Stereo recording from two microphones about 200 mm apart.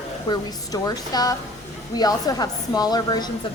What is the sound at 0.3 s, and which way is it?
A woman's voice, 20° left (ahead or behind).